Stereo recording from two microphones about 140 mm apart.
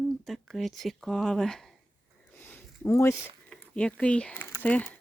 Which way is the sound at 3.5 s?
10° left (ahead or behind).